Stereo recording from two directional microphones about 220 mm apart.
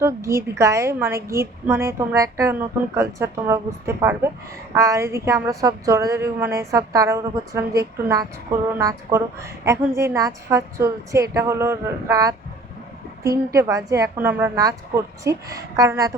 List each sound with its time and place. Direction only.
0.0 s a woman's voice: 15° right (ahead or behind)